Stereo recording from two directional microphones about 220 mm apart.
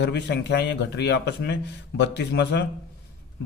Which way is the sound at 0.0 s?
50° left (ahead or behind).